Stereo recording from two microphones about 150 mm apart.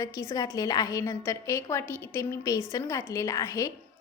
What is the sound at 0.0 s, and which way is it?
A woman's voice, 20° left (ahead or behind).